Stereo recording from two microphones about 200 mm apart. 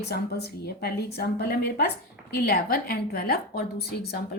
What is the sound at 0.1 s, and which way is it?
A woman's voice, 55° left (ahead or behind).